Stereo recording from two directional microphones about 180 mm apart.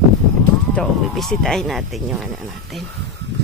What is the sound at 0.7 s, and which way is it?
Speech, centre (ahead or behind).